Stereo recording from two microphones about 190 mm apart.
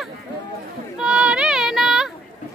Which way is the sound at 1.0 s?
5° right (ahead or behind).